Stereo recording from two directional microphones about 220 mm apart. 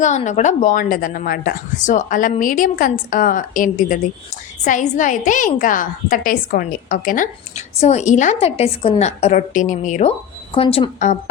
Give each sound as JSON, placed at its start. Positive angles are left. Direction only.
{"t": 0.0, "sound": "a woman's voice", "side_deg": 30}